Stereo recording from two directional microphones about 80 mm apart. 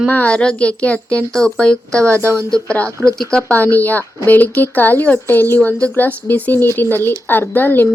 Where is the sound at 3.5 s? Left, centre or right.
Left.